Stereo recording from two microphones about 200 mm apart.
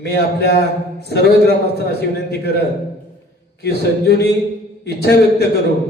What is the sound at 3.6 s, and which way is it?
A man's voice, 55° left (ahead or behind).